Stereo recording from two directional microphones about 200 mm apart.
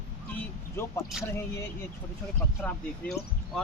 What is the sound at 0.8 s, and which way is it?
Speech, 15° left (ahead or behind).